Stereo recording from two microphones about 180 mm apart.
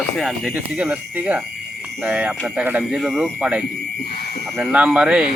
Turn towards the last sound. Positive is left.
turn(degrees=-5)  # may be behind; listen again after turning